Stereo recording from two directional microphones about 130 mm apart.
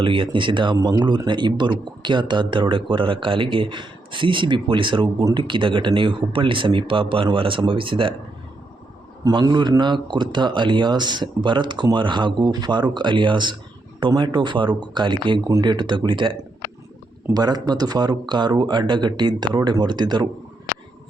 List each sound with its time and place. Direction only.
0.0 s speech: 40° right (ahead or behind)
9.2 s speech: 30° right (ahead or behind)